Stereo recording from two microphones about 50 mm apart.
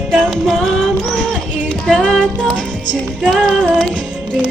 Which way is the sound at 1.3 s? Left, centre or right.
Centre.